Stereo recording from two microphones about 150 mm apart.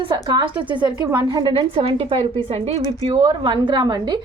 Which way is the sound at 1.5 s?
40° right (ahead or behind).